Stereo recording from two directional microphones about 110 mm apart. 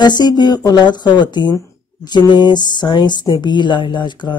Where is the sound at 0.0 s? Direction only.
40° left (ahead or behind).